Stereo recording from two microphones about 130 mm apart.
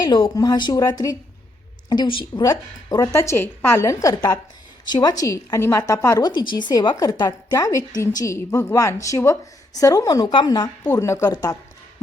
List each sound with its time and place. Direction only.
0.0 s speech: 35° left (ahead or behind)
2.4 s a woman's voice: 30° left (ahead or behind)